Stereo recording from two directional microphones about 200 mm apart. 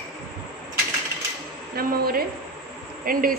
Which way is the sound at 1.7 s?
50° right (ahead or behind).